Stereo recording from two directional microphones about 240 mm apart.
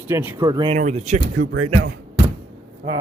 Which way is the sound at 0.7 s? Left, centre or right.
Right.